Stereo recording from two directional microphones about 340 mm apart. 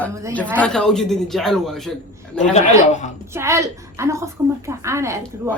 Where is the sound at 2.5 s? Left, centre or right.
Left.